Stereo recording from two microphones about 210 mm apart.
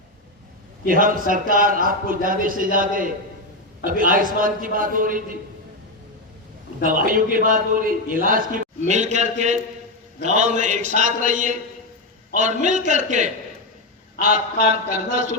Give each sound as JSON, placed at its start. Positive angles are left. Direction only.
{"t": 0.9, "sound": "a man's voice", "side_deg": -40}
{"t": 6.8, "sound": "a man's voice", "side_deg": -40}
{"t": 14.3, "sound": "a man's voice", "side_deg": -35}